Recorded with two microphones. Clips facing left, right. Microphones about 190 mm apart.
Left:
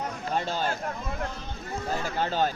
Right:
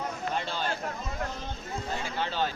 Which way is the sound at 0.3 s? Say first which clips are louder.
Left 6 dB; 45° left (ahead or behind).